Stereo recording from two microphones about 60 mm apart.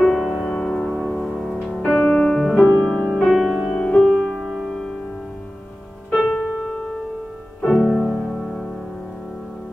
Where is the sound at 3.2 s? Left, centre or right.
Centre.